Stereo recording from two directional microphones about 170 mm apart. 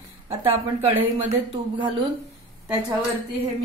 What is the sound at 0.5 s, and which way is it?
Speech, 35° right (ahead or behind).